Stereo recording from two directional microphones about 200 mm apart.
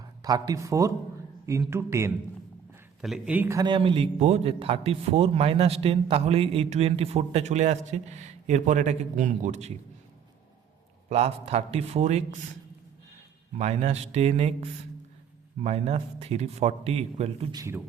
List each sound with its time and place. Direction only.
0.2 s a man's voice: 20° right (ahead or behind); by 9.7 s 35° right (ahead or behind)
11.1 s a man's voice: 30° right (ahead or behind)
13.6 s a man's voice: 35° right (ahead or behind)
17.5 s speech: 15° right (ahead or behind)